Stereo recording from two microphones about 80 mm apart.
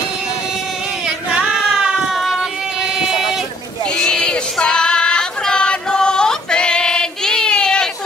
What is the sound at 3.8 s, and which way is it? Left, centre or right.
Female singing, centre.